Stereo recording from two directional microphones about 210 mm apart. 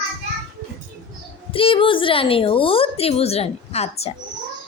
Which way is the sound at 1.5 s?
25° left (ahead or behind).